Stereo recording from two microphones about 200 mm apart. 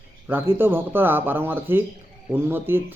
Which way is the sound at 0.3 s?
10° right (ahead or behind).